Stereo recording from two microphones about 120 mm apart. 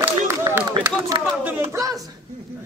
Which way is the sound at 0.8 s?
30° right (ahead or behind).